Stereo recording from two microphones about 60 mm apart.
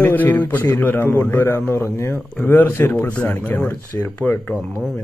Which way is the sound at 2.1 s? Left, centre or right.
Left.